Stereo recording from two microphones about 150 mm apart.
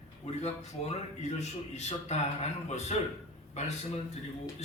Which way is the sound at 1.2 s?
50° left (ahead or behind).